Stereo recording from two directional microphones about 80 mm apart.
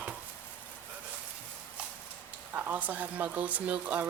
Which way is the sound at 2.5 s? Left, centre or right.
Right.